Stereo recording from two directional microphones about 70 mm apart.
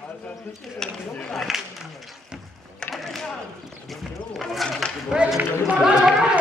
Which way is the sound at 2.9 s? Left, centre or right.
Centre.